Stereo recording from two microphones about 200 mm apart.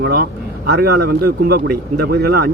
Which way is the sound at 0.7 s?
50° right (ahead or behind).